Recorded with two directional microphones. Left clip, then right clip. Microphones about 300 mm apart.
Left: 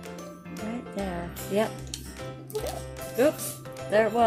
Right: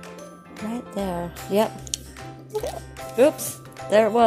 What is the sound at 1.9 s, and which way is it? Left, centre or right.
Music, right.